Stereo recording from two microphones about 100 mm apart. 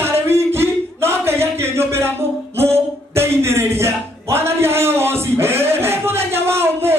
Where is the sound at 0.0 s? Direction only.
25° right (ahead or behind).